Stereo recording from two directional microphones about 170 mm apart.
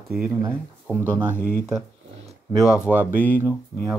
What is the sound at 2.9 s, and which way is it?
Speech, 5° left (ahead or behind).